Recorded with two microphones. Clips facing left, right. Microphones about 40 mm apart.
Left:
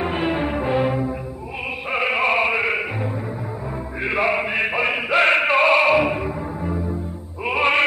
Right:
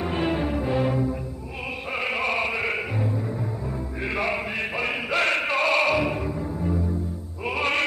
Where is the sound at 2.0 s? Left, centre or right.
Left.